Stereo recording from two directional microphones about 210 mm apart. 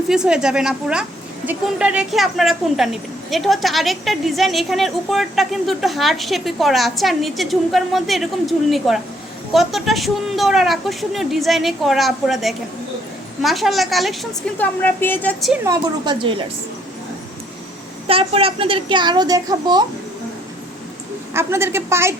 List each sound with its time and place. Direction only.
0.1 s a woman's voice: 5° right (ahead or behind)
15.6 s a woman's voice: 20° right (ahead or behind)
18.1 s a woman's voice: 25° right (ahead or behind)
21.3 s a woman's voice: 10° right (ahead or behind)